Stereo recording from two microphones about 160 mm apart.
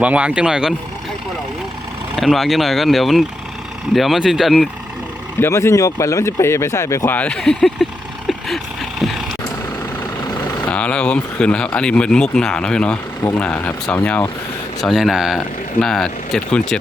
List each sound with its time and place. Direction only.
0.0 s speech: 10° right (ahead or behind)
2.1 s speech: centre (ahead or behind)
5.4 s speech: 15° left (ahead or behind)
8.3 s vehicle: centre (ahead or behind)
10.7 s speech: 10° left (ahead or behind)